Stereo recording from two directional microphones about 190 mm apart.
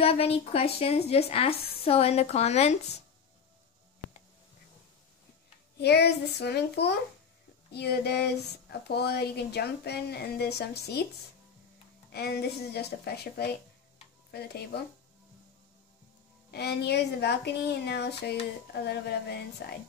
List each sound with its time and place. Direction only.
0.0 s a woman's voice: 30° left (ahead or behind)
5.8 s speech: 60° left (ahead or behind)
12.1 s speech: 55° left (ahead or behind)
16.4 s speech: 60° left (ahead or behind)